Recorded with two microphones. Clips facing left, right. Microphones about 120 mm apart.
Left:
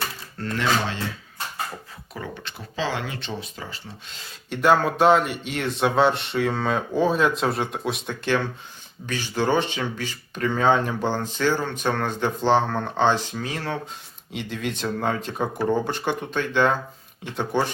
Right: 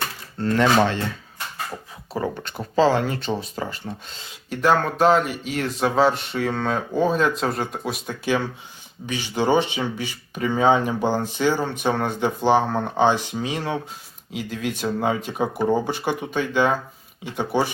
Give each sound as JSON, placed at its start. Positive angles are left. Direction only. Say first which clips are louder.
{"t": 0.4, "sound": "speech", "louder": "right 7 dB", "side_deg": -25}
{"t": 2.1, "sound": "speech", "louder": "right 8 dB", "side_deg": -40}
{"t": 4.4, "sound": "speech", "louder": "left 1 dB", "side_deg": 0}
{"t": 14.3, "sound": "speech", "louder": "right 2 dB", "side_deg": -5}